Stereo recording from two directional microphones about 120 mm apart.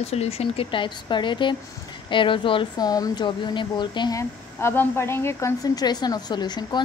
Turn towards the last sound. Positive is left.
turn(degrees=35)  # may be behind; listen again after turning